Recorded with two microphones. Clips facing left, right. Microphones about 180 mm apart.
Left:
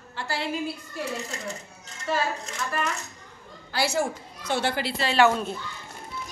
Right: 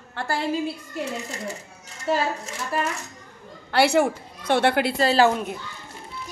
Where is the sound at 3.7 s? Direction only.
65° right (ahead or behind).